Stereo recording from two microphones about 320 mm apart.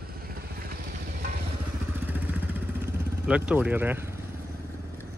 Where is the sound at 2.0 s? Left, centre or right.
Centre.